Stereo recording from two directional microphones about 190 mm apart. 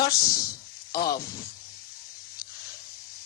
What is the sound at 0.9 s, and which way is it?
Speech, 50° left (ahead or behind).